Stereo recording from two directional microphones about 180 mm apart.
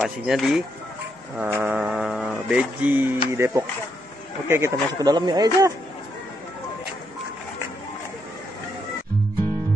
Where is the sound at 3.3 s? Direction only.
15° right (ahead or behind).